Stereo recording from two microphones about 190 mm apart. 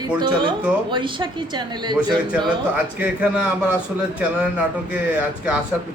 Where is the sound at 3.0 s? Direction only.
10° right (ahead or behind).